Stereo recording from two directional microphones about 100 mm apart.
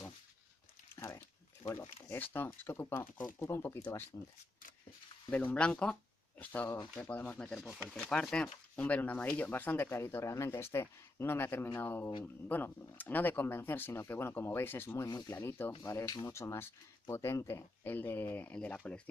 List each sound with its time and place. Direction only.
0.9 s a sound: 30° left (ahead or behind)
2.0 s speech: 30° left (ahead or behind)
5.3 s speech: 15° left (ahead or behind)